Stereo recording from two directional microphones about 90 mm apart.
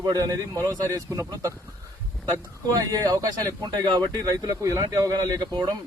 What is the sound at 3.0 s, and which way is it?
A man's voice, 35° right (ahead or behind).